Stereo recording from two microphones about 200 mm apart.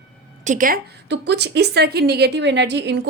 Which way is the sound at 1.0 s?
60° right (ahead or behind).